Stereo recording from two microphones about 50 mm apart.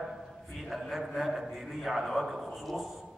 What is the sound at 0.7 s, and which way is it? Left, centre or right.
A man's voice, centre.